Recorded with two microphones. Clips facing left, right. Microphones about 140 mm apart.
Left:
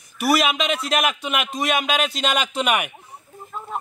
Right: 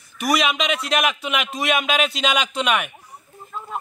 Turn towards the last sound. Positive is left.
turn(degrees=5)  # may be behind; listen again after turning